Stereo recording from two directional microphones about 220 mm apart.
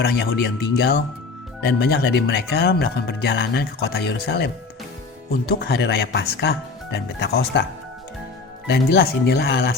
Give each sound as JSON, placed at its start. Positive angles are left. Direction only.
{"t": 0.0, "sound": "speech", "side_deg": 55}